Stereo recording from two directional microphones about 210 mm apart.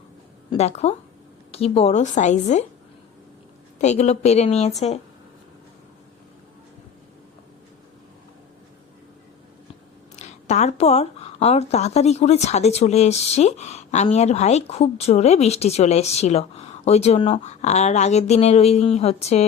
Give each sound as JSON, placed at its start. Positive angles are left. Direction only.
{"t": 0.5, "sound": "speech", "side_deg": 30}
{"t": 3.8, "sound": "speech", "side_deg": 35}
{"t": 10.2, "sound": "speech", "side_deg": 35}